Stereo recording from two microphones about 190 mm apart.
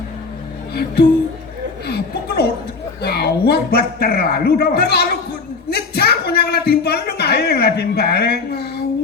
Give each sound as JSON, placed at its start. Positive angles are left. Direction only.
{"t": 0.7, "sound": "a man's voice", "side_deg": 60}
{"t": 1.9, "sound": "chuckle", "side_deg": 55}
{"t": 3.0, "sound": "a man's voice", "side_deg": 60}
{"t": 5.7, "sound": "a sound", "side_deg": 55}